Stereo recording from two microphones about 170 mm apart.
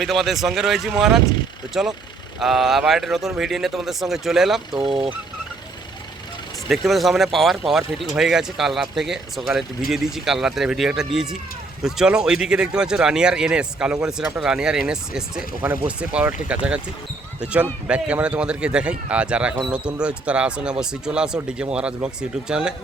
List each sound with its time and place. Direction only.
0.0 s speech: centre (ahead or behind)
4.7 s speech: 25° right (ahead or behind)
6.7 s speech: centre (ahead or behind)